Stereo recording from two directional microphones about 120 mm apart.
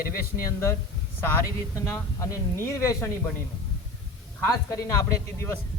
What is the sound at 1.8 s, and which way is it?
Speech, 20° left (ahead or behind).